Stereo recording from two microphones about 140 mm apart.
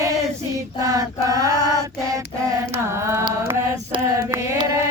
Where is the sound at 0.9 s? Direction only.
25° right (ahead or behind).